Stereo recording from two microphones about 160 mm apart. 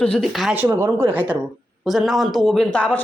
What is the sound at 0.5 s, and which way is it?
A woman's voice, 15° right (ahead or behind).